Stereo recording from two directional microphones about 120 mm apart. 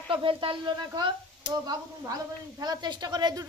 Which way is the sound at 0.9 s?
35° right (ahead or behind).